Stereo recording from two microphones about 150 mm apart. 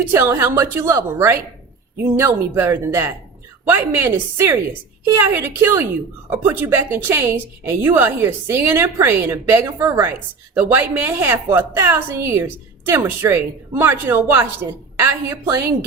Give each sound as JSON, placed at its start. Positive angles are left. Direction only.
{"t": 0.1, "sound": "a woman's voice", "side_deg": -20}